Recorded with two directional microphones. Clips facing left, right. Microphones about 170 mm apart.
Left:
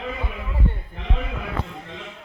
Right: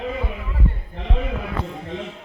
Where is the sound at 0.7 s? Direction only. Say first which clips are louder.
Even; 25° left (ahead or behind).